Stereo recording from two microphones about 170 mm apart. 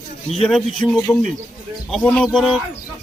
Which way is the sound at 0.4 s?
5° left (ahead or behind).